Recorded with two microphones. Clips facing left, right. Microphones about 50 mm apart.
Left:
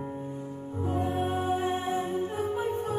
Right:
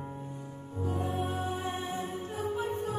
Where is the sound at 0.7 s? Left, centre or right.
Left.